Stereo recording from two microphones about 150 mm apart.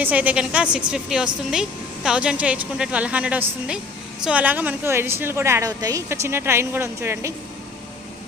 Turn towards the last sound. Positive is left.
turn(degrees=-15)  # may be behind; listen again after turning